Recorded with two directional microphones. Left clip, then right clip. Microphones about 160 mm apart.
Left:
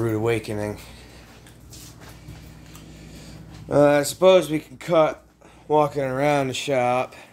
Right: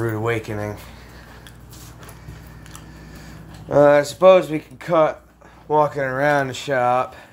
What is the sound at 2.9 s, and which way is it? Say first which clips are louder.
Speech: right 2 dB; 20° left (ahead or behind).